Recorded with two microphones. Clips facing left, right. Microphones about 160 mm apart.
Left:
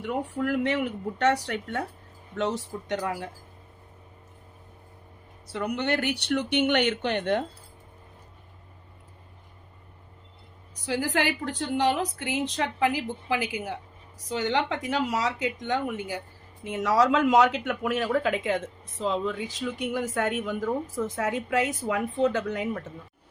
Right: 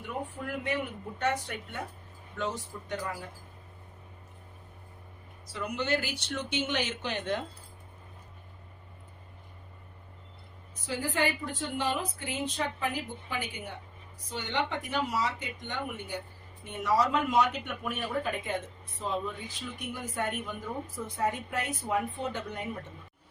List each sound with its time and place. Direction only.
0.0 s speech: 80° left
2.3 s speech: 75° left (ahead or behind)
5.5 s speech: 65° left (ahead or behind)
10.8 s speech: 85° left